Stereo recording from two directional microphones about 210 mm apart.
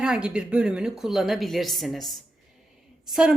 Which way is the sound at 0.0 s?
5° right (ahead or behind).